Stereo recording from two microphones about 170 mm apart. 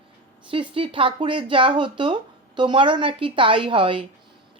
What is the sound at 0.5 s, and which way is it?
A woman's voice, 30° right (ahead or behind).